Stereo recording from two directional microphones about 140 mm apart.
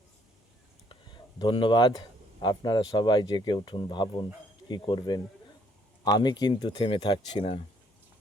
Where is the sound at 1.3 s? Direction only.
35° left (ahead or behind).